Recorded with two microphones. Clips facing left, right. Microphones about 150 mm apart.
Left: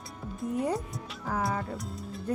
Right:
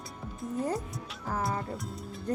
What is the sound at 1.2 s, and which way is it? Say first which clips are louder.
Speech: left 1 dB; 5° right (ahead or behind).